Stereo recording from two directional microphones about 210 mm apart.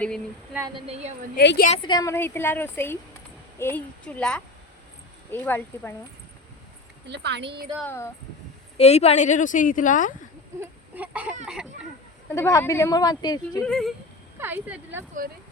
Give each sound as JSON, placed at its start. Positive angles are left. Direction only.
{"t": 0.7, "sound": "a woman's voice", "side_deg": -30}
{"t": 1.4, "sound": "a woman's voice", "side_deg": 50}
{"t": 1.7, "sound": "a woman's voice", "side_deg": 20}
{"t": 7.1, "sound": "speech", "side_deg": -55}
{"t": 7.9, "sound": "speech", "side_deg": 10}
{"t": 8.8, "sound": "a woman's voice", "side_deg": 30}
{"t": 10.6, "sound": "a sound", "side_deg": -5}
{"t": 11.4, "sound": "a woman's voice", "side_deg": -5}
{"t": 12.3, "sound": "speech", "side_deg": 15}
{"t": 13.7, "sound": "a woman's voice", "side_deg": 0}
{"t": 14.3, "sound": "speech", "side_deg": -10}